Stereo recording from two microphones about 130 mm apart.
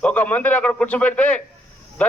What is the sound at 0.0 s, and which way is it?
A man's voice, 10° left (ahead or behind).